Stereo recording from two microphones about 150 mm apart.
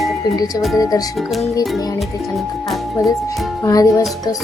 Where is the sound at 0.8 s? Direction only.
25° left (ahead or behind).